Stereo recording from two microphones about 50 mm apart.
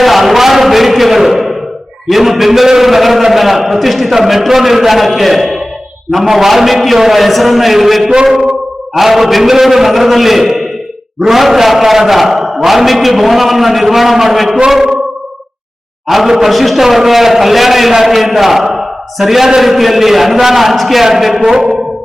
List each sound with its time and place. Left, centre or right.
0.0 s a sound: centre
2.0 s a man's voice: centre
8.1 s a man's voice: centre
9.0 s a man's voice: centre
14.7 s a sound: centre
16.0 s a man's voice: centre